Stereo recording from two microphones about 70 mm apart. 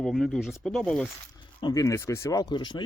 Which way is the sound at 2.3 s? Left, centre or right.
Left.